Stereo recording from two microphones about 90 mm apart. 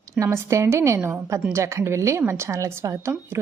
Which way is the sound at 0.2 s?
35° right (ahead or behind).